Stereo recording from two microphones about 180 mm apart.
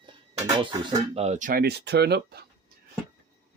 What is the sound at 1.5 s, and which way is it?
Speech, 60° right (ahead or behind).